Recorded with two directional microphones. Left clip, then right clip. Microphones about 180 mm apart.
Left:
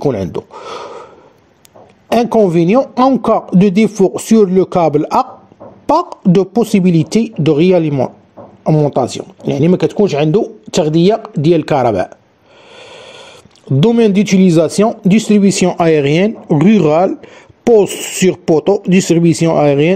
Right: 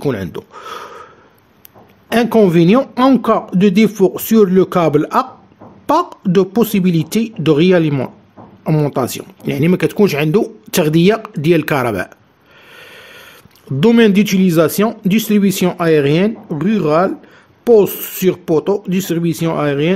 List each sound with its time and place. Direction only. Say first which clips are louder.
0.1 s speech: left 4 dB; 5° left (ahead or behind)
2.0 s a sound: left 2 dB; 5° left (ahead or behind)
2.5 s speech: even; 5° left (ahead or behind)
2.8 s speech: left 2 dB; 10° right (ahead or behind)
3.2 s speech: left 2 dB; 5° left (ahead or behind)
8.6 s speech: left 4 dB; 10° right (ahead or behind)
12.7 s a sound: left 3 dB; 5° left (ahead or behind)
13.7 s speech: even; centre (ahead or behind)
15.8 s speech: left 1 dB; 25° left (ahead or behind)